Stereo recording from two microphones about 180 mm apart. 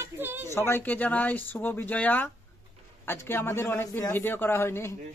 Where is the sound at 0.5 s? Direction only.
15° left (ahead or behind).